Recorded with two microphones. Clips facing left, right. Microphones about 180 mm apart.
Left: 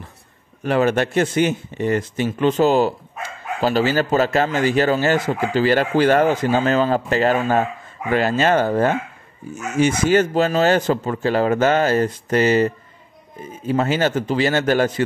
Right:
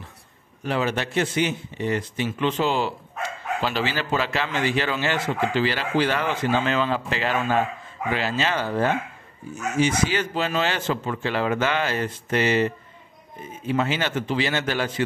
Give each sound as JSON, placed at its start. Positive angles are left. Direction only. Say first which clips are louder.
{"t": 0.7, "sound": "speech", "louder": "left 7 dB", "side_deg": 50}